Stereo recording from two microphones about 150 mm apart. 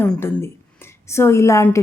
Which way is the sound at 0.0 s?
15° left (ahead or behind).